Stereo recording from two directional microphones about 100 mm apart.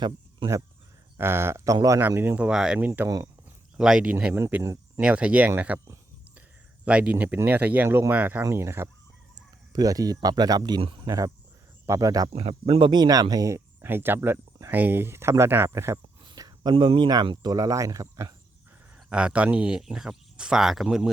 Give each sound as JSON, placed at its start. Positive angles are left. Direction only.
{"t": 1.1, "sound": "speech", "side_deg": -25}
{"t": 2.0, "sound": "speech", "side_deg": -20}
{"t": 2.5, "sound": "speech", "side_deg": -5}
{"t": 6.8, "sound": "speech", "side_deg": -10}
{"t": 9.7, "sound": "speech", "side_deg": -35}
{"t": 10.8, "sound": "speech", "side_deg": -60}
{"t": 11.0, "sound": "speech", "side_deg": -40}
{"t": 12.3, "sound": "speech", "side_deg": -80}
{"t": 12.8, "sound": "speech", "side_deg": -45}
{"t": 13.8, "sound": "speech", "side_deg": -20}
{"t": 16.2, "sound": "a sound", "side_deg": -45}
{"t": 16.7, "sound": "speech", "side_deg": -60}
{"t": 17.4, "sound": "speech", "side_deg": -40}
{"t": 19.1, "sound": "speech", "side_deg": -10}